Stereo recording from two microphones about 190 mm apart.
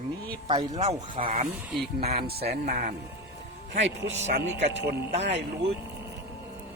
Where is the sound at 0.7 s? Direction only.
35° right (ahead or behind).